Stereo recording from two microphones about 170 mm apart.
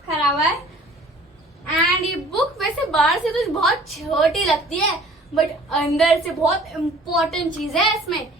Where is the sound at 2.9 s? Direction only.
Centre (ahead or behind).